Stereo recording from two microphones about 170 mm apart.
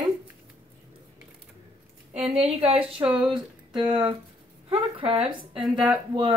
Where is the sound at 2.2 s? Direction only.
35° right (ahead or behind).